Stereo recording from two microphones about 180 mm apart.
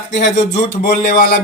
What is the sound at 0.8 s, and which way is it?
Speech, 55° left (ahead or behind).